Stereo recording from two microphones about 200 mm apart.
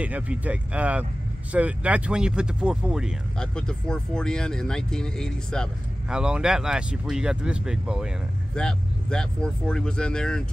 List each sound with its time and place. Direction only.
0.0 s speech: 5° right (ahead or behind)